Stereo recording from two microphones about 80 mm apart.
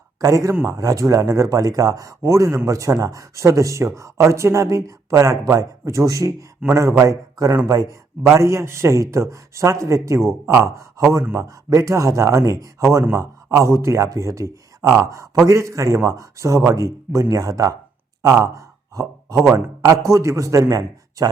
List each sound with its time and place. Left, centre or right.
0.2 s speech: right
8.2 s speech: right
18.2 s a sound: right
19.5 s speech: right